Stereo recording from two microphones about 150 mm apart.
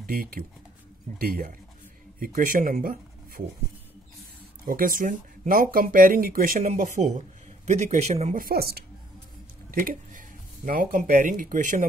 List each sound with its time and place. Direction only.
0.0 s speech: 75° right (ahead or behind)
1.1 s speech: 90° right
2.1 s speech: 70° right (ahead or behind)
4.6 s speech: 70° right (ahead or behind); by 8.4 s 45° right (ahead or behind)
8.4 s speech: 80° right
9.7 s speech: 65° right (ahead or behind)